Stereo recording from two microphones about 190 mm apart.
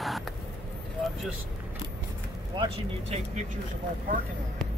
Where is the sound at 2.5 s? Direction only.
25° right (ahead or behind).